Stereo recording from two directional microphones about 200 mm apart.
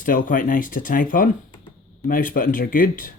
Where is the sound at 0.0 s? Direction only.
40° left (ahead or behind).